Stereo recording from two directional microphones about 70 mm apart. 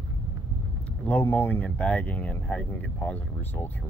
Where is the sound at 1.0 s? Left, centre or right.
Left.